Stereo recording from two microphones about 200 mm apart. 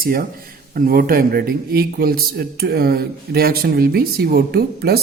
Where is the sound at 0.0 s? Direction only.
50° right (ahead or behind).